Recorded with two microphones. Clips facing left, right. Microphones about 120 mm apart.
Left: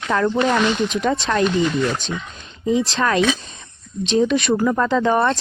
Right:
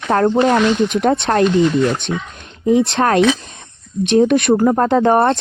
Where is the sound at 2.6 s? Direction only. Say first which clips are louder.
Right 5 dB; 60° right (ahead or behind).